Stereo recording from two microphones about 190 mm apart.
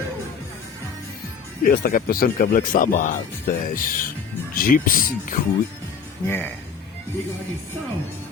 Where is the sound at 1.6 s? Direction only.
50° left (ahead or behind).